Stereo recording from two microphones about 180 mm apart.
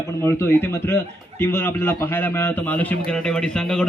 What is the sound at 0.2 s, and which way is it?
A man's voice, 15° left (ahead or behind).